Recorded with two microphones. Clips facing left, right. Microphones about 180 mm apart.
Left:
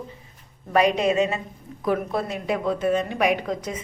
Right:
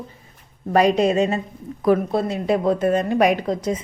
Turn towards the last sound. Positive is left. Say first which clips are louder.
# right 4 dB
turn(degrees=-30)  # may be behind; listen again after turning